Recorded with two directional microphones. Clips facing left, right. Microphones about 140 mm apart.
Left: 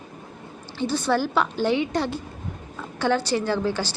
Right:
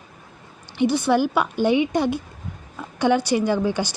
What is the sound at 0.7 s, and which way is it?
A woman's voice, 15° right (ahead or behind).